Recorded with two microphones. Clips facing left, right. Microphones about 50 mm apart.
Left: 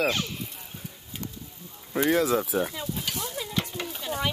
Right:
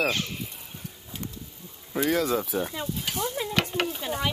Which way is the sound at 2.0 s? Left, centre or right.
Centre.